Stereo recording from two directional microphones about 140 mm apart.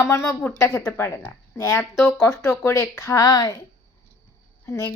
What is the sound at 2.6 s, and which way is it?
Speech, 20° left (ahead or behind).